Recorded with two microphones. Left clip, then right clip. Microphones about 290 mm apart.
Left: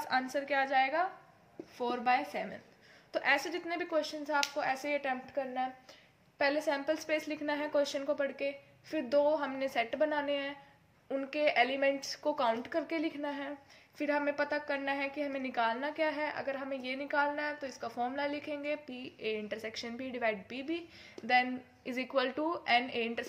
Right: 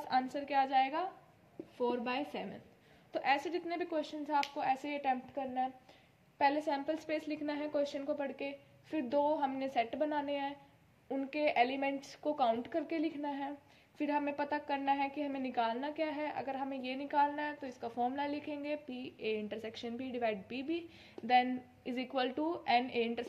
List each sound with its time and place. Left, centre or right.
0.0 s a woman's voice: left